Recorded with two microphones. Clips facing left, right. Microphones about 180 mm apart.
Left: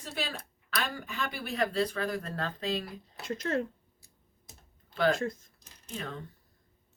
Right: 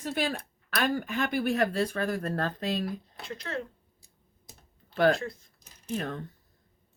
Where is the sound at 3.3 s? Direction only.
40° left (ahead or behind).